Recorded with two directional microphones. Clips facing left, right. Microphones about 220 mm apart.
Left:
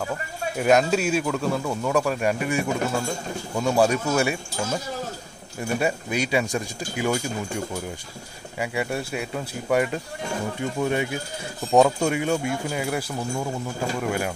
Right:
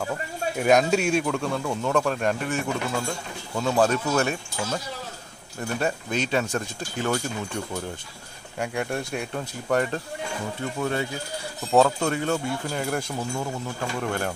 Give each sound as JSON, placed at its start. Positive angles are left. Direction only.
{"t": 0.6, "sound": "speech", "side_deg": 0}